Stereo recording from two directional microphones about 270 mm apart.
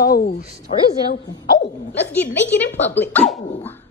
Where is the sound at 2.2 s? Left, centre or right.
Centre.